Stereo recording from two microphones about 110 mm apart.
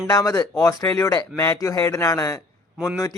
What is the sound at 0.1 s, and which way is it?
A man's voice, 30° left (ahead or behind).